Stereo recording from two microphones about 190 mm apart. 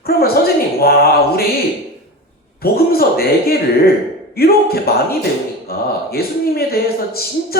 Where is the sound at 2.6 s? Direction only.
55° left (ahead or behind).